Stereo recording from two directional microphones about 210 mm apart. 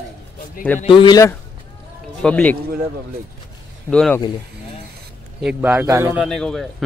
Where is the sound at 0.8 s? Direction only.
25° left (ahead or behind).